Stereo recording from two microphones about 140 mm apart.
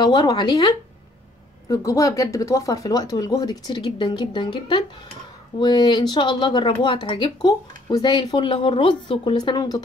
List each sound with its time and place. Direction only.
0.0 s speech: 30° left (ahead or behind)
1.7 s speech: 25° left (ahead or behind)